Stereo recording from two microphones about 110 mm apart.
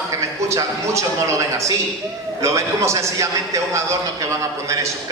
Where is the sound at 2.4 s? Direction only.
25° right (ahead or behind).